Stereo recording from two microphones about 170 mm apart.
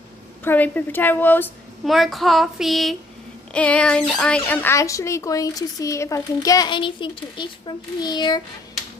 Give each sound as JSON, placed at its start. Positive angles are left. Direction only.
{"t": 0.4, "sound": "a woman's voice", "side_deg": 10}
{"t": 1.9, "sound": "child singing", "side_deg": 0}
{"t": 3.5, "sound": "a woman's voice", "side_deg": 5}
{"t": 4.1, "sound": "child singing", "side_deg": 5}
{"t": 4.4, "sound": "speech", "side_deg": 10}